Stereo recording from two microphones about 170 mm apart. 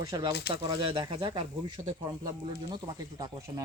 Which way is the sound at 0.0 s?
25° right (ahead or behind).